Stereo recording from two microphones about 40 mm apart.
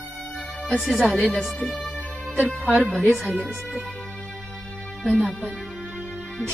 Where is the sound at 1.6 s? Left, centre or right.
Centre.